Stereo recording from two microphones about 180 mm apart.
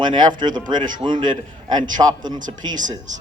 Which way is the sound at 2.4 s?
45° right (ahead or behind).